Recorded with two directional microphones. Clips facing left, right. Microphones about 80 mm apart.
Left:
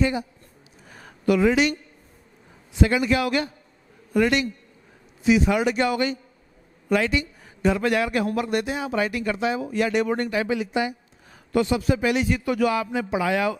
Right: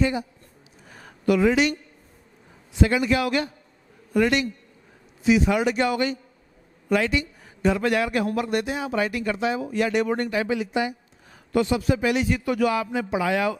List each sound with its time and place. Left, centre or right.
1.2 s speech: centre
2.8 s speech: centre